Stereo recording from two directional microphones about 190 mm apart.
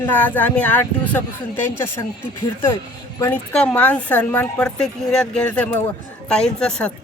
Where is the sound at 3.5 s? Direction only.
5° left (ahead or behind).